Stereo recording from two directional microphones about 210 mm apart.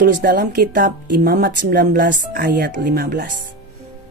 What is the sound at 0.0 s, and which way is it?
Speech, 45° right (ahead or behind).